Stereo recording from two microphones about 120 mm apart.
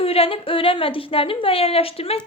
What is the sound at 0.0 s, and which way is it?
A woman's voice, 55° left (ahead or behind).